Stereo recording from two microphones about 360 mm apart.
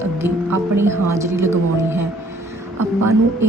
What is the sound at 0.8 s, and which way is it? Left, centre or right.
Speech, centre.